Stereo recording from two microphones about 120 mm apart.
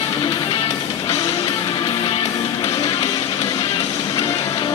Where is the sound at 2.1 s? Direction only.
60° left (ahead or behind).